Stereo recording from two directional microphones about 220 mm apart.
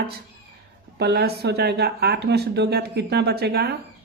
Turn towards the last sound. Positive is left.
turn(degrees=-45)  # may be behind; listen again after turning